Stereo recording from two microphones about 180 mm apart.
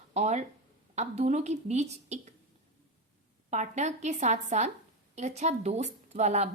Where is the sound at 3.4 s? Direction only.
40° right (ahead or behind).